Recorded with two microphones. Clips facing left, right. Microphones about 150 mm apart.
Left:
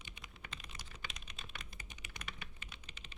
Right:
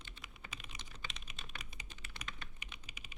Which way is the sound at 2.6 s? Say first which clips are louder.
Even; 15° right (ahead or behind).